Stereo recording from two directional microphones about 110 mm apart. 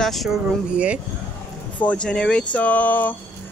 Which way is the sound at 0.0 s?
Centre (ahead or behind).